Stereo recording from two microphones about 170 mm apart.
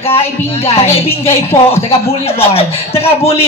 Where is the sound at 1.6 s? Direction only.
35° left (ahead or behind).